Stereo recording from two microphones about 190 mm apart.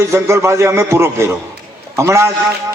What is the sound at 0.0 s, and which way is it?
A man's voice, 15° right (ahead or behind).